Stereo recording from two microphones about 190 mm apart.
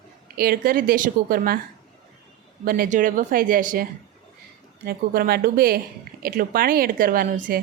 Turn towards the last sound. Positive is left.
turn(degrees=-45)  # may be behind; listen again after turning